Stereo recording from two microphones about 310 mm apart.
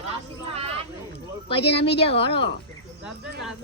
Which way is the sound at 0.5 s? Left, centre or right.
Centre.